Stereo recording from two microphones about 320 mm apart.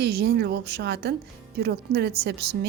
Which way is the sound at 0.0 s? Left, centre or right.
Right.